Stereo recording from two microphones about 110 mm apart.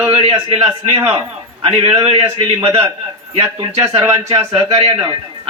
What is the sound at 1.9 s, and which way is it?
Speech, 55° right (ahead or behind).